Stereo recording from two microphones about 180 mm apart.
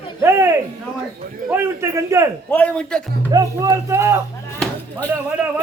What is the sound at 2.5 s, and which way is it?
Speech, 10° left (ahead or behind).